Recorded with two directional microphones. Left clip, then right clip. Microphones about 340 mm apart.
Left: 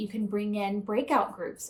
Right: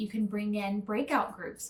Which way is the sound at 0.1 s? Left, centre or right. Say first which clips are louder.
Left 3 dB; centre.